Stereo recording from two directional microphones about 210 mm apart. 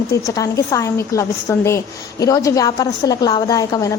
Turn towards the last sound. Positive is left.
turn(degrees=15)  # may be behind; listen again after turning